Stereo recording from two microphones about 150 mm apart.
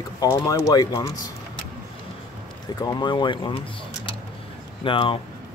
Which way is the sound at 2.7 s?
30° left (ahead or behind).